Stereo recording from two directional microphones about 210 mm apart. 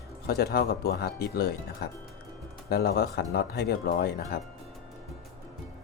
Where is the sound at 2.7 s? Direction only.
45° left (ahead or behind).